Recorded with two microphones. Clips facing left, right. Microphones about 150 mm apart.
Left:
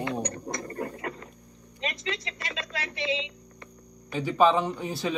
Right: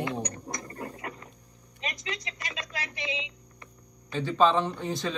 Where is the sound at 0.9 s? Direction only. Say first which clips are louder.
Left 4 dB; 20° right (ahead or behind).